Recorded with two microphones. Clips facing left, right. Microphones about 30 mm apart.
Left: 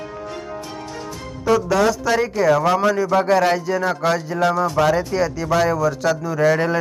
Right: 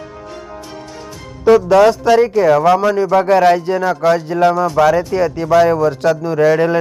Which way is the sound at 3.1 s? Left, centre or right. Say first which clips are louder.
Right 8 dB; right.